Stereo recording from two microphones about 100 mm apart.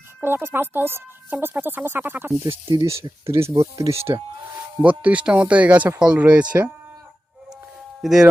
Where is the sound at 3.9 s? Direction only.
80° right.